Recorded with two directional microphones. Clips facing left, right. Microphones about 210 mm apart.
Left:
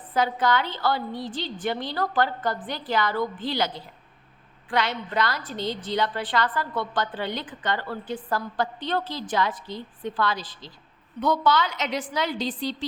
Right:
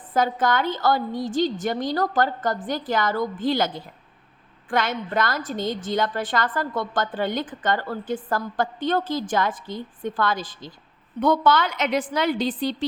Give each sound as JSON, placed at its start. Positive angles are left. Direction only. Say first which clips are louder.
{"t": 0.1, "sound": "a woman's voice", "louder": "right 1 dB", "side_deg": -50}